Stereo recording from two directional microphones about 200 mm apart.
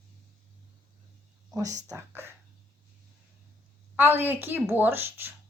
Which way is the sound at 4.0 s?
10° right (ahead or behind).